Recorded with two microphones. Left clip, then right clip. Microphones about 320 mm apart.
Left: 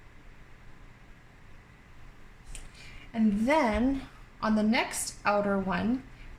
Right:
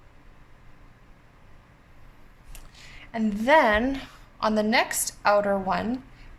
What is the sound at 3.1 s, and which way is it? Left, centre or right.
A woman's voice, right.